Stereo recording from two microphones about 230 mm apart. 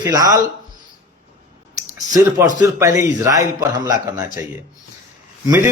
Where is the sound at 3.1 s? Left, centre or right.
Centre.